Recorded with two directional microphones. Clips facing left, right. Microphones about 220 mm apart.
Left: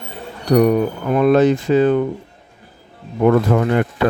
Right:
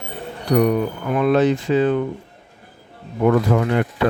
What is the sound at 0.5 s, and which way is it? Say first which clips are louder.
Speech: left 3 dB; 45° left (ahead or behind).